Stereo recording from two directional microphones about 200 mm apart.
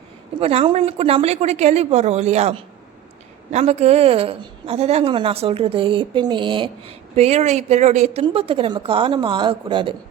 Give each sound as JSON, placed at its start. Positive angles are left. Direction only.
{"t": 0.3, "sound": "a woman's voice", "side_deg": -25}